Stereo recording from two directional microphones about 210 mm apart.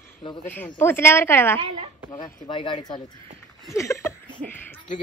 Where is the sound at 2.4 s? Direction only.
25° left (ahead or behind).